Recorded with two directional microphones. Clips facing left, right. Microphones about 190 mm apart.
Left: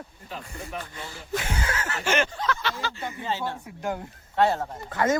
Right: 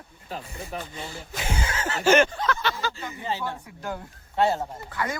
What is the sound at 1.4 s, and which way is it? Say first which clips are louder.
Music: left 1 dB; 25° right (ahead or behind).